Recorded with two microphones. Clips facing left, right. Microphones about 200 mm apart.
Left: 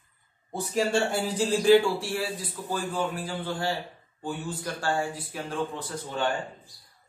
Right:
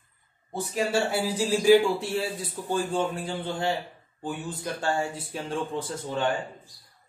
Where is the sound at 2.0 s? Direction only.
25° right (ahead or behind).